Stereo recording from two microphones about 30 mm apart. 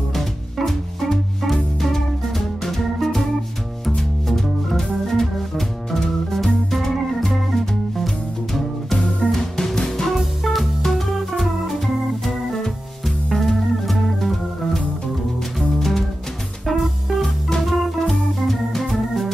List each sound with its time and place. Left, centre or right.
0.1 s music: centre
4.3 s organ: centre
9.3 s music: centre
10.1 s music: centre
13.3 s music: centre
16.7 s music: centre
17.6 s organ: centre